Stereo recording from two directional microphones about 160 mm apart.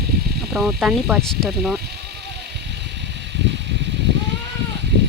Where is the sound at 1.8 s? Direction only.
90° right.